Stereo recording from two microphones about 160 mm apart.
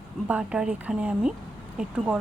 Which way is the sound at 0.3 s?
5° right (ahead or behind).